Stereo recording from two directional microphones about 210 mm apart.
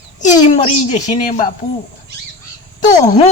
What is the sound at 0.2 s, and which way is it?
Speech, 35° left (ahead or behind).